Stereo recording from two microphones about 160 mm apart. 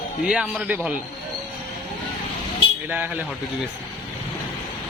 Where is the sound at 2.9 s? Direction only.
10° right (ahead or behind).